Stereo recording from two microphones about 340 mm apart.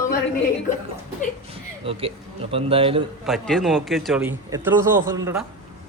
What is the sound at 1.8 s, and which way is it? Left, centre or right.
A man's voice, centre.